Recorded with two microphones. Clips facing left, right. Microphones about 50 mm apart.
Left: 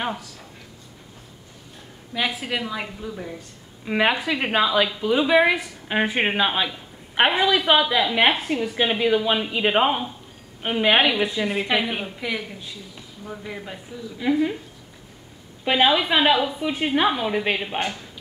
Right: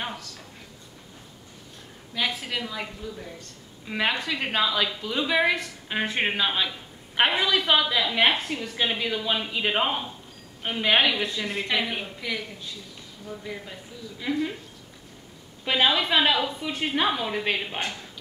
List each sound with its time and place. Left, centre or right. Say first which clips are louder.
0.0 s speech: left 6 dB; centre
2.1 s a woman's voice: left 3 dB; centre
15.6 s a woman's voice: left 4 dB; centre